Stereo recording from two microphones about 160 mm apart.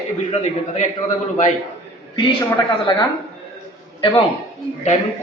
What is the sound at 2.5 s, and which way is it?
A man's voice, 30° left (ahead or behind).